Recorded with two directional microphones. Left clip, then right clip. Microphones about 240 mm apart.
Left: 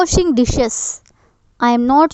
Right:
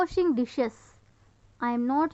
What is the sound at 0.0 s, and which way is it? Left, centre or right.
Speech, left.